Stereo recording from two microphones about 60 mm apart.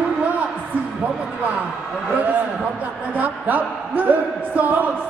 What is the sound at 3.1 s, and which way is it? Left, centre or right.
Speech, right.